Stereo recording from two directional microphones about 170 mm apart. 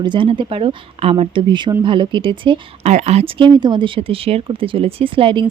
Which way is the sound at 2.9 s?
40° right (ahead or behind).